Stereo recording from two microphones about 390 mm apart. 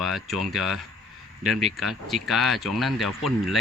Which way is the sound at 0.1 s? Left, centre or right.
Centre.